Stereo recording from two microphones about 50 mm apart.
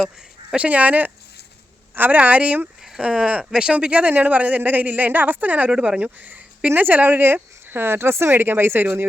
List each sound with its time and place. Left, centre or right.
0.5 s a woman's voice: right
5.7 s speech: centre
6.0 s a woman's voice: right